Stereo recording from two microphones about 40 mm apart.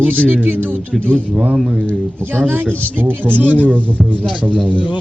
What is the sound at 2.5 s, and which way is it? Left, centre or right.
Speech, right.